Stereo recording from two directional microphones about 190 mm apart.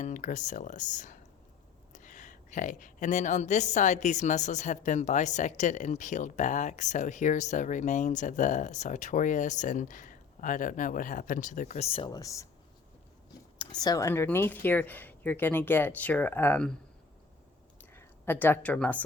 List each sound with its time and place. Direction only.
0.0 s speech: 40° left (ahead or behind); by 12.5 s 15° left (ahead or behind)
13.6 s speech: 20° left (ahead or behind)
17.9 s speech: 10° left (ahead or behind)